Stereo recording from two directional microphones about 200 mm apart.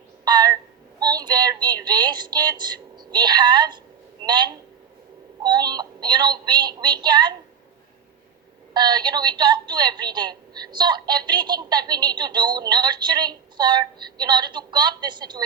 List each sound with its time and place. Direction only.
0.3 s a sound: 20° right (ahead or behind)
4.2 s a man's voice: 20° right (ahead or behind)
8.7 s a woman's voice: 20° right (ahead or behind)